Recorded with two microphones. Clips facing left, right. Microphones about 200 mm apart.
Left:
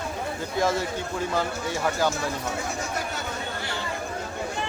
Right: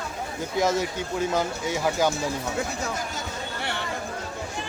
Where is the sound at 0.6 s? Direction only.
15° right (ahead or behind).